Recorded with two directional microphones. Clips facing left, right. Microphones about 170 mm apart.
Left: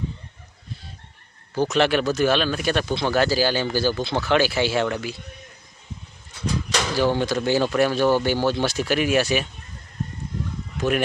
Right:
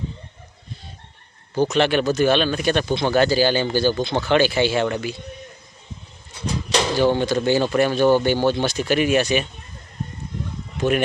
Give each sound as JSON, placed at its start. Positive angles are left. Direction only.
{"t": 1.5, "sound": "speech", "side_deg": 0}
{"t": 6.7, "sound": "a sound", "side_deg": -25}
{"t": 7.1, "sound": "speech", "side_deg": 0}